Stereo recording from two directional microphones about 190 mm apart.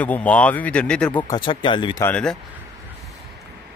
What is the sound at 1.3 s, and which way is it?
Speech, 25° left (ahead or behind).